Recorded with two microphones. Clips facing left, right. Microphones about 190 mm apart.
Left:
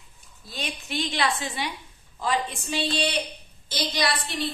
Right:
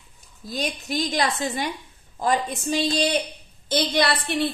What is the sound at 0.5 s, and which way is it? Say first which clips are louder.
A woman's voice: right 6 dB; 40° right (ahead or behind).